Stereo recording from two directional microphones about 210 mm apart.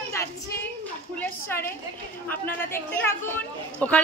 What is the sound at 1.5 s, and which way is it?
A woman's voice, 10° left (ahead or behind).